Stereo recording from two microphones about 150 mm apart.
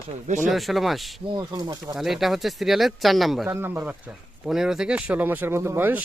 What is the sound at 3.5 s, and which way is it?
Speech, 15° right (ahead or behind).